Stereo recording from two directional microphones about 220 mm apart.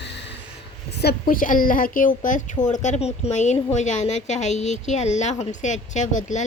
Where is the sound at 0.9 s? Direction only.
45° left (ahead or behind).